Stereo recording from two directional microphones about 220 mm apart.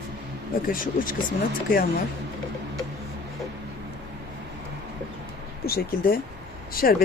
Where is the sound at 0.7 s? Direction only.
40° left (ahead or behind).